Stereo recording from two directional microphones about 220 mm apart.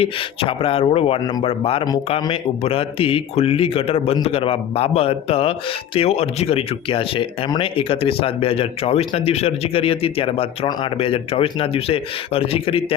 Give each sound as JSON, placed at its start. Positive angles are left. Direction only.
{"t": 0.0, "sound": "a man's voice", "side_deg": 25}